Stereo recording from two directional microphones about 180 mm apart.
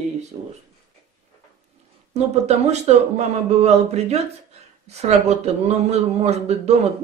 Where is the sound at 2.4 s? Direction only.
35° right (ahead or behind).